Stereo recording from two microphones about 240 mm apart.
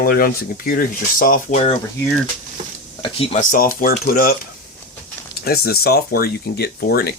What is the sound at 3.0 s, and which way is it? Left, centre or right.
Speech, left.